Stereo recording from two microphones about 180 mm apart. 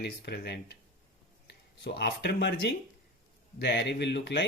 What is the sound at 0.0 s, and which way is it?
Speech, 65° left (ahead or behind).